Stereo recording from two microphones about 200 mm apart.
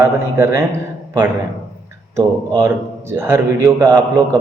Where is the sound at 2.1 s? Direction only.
15° right (ahead or behind).